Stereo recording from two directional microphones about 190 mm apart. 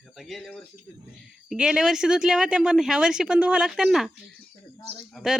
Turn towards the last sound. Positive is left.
turn(degrees=-5)  # may be behind; listen again after turning